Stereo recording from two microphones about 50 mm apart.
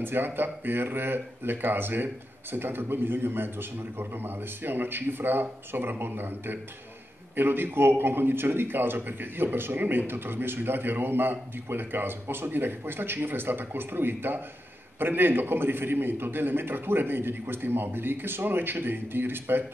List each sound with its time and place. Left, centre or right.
0.0 s a man's voice: right